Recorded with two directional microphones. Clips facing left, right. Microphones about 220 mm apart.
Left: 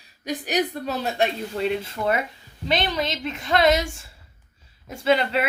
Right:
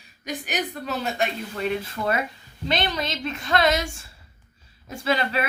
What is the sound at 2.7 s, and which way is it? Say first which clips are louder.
A woman's voice: left 2 dB; 20° left (ahead or behind).